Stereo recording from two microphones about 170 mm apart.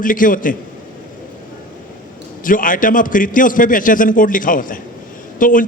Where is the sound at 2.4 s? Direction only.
50° left (ahead or behind).